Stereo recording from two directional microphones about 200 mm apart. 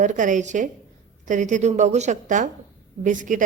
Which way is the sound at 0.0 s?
40° right (ahead or behind).